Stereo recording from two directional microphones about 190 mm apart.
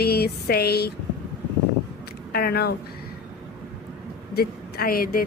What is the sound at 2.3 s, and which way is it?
Speech, 55° left (ahead or behind).